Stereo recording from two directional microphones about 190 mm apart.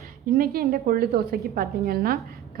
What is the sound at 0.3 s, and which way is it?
A woman's voice, 50° right (ahead or behind).